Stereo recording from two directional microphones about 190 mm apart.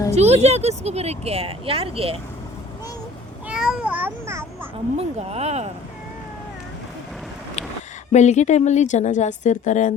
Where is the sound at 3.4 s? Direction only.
5° right (ahead or behind).